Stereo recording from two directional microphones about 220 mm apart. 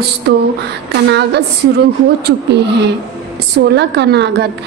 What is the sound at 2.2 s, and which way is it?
A woman's voice, 50° right (ahead or behind).